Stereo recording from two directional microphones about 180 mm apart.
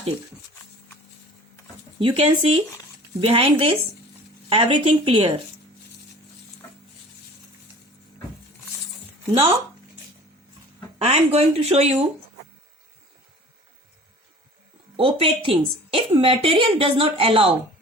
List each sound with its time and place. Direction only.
2.0 s a woman's voice: 30° right (ahead or behind)
10.9 s a woman's voice: 35° right (ahead or behind)
14.9 s a woman's voice: 30° right (ahead or behind)